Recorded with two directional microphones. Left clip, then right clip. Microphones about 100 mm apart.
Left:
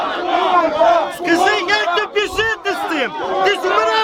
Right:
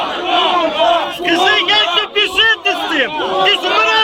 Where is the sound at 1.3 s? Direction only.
55° left (ahead or behind).